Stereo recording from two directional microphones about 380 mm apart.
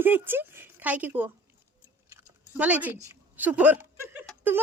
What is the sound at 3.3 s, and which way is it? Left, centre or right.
Speech, centre.